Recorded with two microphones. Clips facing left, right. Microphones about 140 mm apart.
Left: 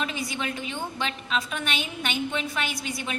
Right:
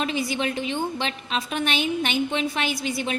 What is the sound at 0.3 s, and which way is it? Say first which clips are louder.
A woman's voice: right 6 dB; 30° right (ahead or behind).